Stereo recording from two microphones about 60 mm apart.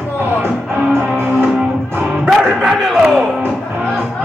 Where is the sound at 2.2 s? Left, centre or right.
Centre.